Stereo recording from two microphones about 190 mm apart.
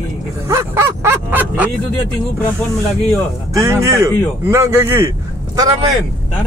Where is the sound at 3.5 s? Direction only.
15° right (ahead or behind).